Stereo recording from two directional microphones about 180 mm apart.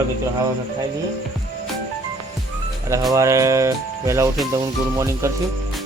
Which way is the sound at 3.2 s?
15° right (ahead or behind).